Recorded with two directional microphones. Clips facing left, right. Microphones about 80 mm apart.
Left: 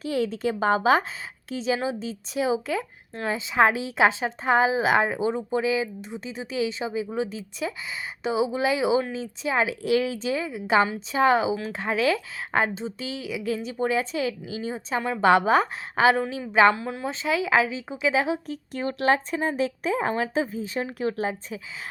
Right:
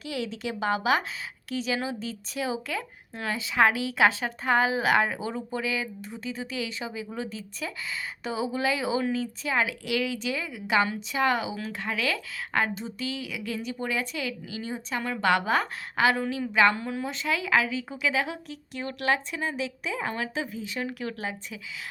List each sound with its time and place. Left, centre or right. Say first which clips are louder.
0.0 s a woman's voice: left 7 dB; left
16.7 s a woman's voice: left 1 dB; centre
17.1 s a woman's voice: left 4 dB; left
18.4 s speech: left 6 dB; left